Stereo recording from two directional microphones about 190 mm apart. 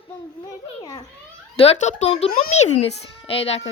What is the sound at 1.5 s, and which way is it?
A child's voice, 35° left (ahead or behind).